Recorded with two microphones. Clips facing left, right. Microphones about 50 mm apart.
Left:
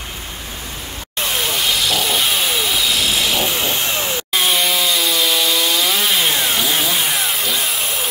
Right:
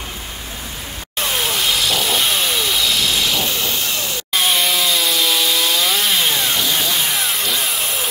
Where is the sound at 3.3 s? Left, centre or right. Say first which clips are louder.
Left 2 dB; left.